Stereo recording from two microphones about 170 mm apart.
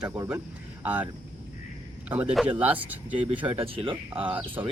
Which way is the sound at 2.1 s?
10° right (ahead or behind).